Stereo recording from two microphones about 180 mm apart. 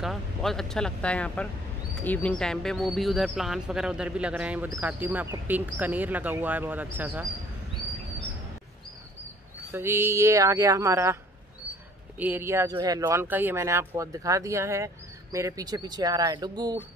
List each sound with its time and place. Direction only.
0.0 s speech: centre (ahead or behind)
9.7 s speech: 10° right (ahead or behind)
12.2 s speech: 10° right (ahead or behind)